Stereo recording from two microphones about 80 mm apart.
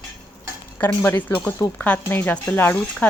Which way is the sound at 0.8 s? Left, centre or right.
Left.